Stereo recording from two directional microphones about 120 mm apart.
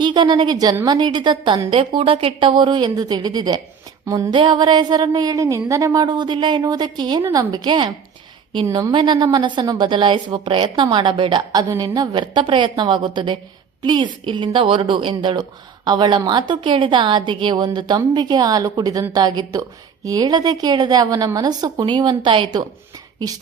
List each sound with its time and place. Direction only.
0.0 s a woman's voice: 40° right (ahead or behind)
4.0 s a sound: 25° right (ahead or behind)
4.3 s a woman's voice: 40° right (ahead or behind)
8.9 s a woman's voice: 40° right (ahead or behind)